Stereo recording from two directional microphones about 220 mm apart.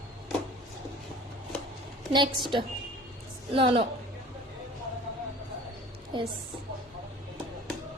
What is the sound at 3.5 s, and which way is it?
Speech, 25° right (ahead or behind).